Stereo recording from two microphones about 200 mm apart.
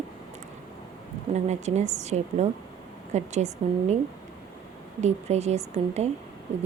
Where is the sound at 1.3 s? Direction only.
35° right (ahead or behind).